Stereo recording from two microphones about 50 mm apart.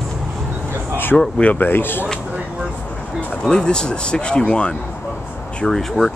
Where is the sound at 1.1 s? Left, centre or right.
Left.